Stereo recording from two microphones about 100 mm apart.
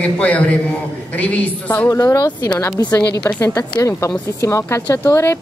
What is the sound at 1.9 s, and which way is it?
Speech, 35° left (ahead or behind).